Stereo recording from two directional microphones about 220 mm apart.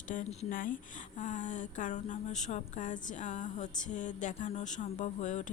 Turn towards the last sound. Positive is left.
turn(degrees=35)  # may be behind; listen again after turning